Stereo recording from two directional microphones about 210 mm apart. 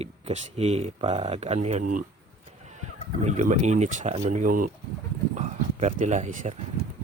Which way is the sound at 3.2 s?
35° right (ahead or behind).